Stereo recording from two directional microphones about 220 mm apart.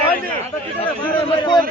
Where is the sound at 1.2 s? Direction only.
20° left (ahead or behind).